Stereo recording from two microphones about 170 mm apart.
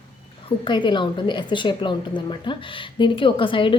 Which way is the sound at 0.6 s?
25° left (ahead or behind).